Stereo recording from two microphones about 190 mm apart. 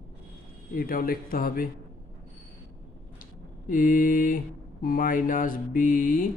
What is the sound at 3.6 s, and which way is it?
Mantra, 45° left (ahead or behind).